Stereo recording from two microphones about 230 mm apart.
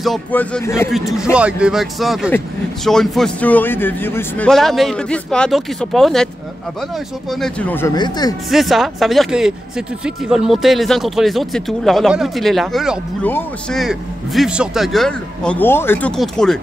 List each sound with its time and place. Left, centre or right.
0.0 s speech: centre
7.2 s speech: centre
8.5 s speech: centre